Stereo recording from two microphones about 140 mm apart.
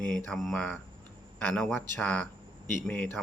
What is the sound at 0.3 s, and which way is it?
Speech, centre (ahead or behind).